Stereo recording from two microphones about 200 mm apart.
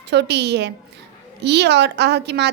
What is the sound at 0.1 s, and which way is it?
A woman's voice, 60° right (ahead or behind).